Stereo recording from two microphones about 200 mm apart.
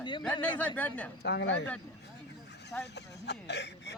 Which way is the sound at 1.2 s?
60° left (ahead or behind).